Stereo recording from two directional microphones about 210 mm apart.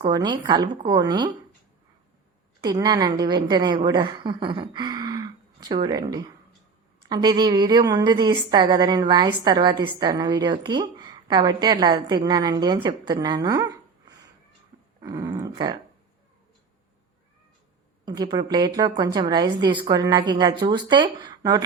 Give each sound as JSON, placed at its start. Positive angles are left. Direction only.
{"t": 0.1, "sound": "a woman's voice", "side_deg": -20}
{"t": 2.6, "sound": "a woman's voice", "side_deg": -20}
{"t": 18.0, "sound": "a woman's voice", "side_deg": -20}